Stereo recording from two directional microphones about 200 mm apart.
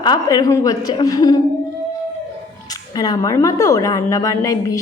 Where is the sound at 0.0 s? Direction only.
20° left (ahead or behind).